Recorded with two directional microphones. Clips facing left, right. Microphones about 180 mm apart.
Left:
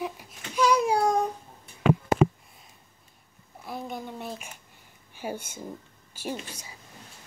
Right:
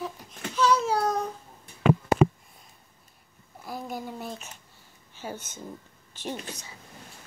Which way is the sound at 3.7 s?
5° right (ahead or behind).